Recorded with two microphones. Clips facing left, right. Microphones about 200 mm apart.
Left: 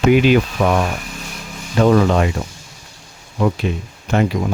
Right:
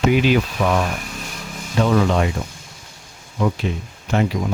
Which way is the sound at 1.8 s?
50° left (ahead or behind).